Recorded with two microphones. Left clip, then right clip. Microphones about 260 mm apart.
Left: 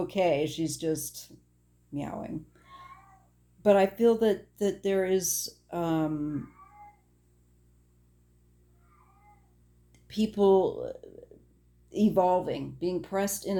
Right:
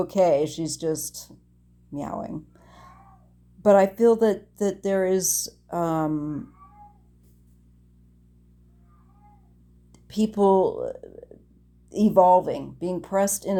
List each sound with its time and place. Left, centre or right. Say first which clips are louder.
0.1 s speech: right 6 dB; right
1.9 s a sound: right 5 dB; right
3.6 s speech: right 5 dB; right
9.9 s speech: right 5 dB; right